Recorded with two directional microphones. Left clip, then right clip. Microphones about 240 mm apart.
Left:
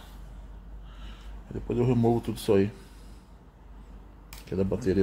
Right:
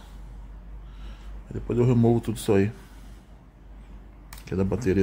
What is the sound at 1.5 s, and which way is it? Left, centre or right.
Speech, centre.